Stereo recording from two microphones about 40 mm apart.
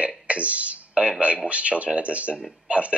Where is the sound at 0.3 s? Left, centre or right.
Right.